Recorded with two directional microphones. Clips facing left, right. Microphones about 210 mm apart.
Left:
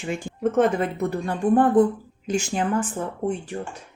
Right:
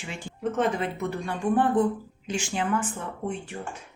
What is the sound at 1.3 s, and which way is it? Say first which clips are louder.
Speech: left 5 dB; 45° left (ahead or behind).